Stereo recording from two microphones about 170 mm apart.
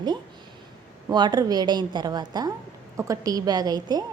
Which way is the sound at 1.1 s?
25° right (ahead or behind).